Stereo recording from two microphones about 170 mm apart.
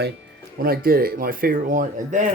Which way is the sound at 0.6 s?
60° right (ahead or behind).